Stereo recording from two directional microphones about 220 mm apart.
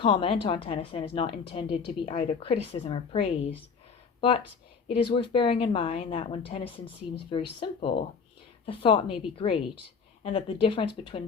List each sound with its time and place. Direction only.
0.0 s a woman's voice: 25° left (ahead or behind)